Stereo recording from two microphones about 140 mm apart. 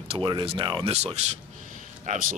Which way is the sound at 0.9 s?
50° right (ahead or behind).